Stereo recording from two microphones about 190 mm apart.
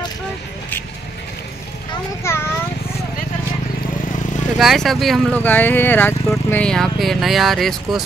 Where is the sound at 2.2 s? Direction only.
15° left (ahead or behind).